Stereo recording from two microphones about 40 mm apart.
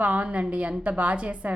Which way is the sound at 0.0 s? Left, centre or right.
Right.